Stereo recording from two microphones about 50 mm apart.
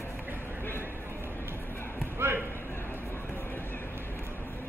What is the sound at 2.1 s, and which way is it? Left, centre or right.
Basketball bounce, right.